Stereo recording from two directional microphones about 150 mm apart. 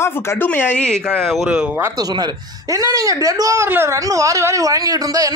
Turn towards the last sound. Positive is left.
turn(degrees=-25)  # may be behind; listen again after turning